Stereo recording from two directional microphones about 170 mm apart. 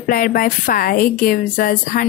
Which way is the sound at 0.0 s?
55° left (ahead or behind).